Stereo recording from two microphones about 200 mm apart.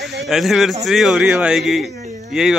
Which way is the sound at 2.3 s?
5° right (ahead or behind).